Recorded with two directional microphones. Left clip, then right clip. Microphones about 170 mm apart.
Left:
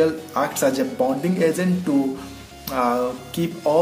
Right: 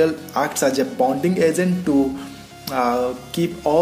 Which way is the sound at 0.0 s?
30° right (ahead or behind).